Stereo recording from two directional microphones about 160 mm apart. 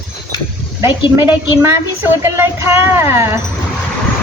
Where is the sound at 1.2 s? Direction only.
15° right (ahead or behind).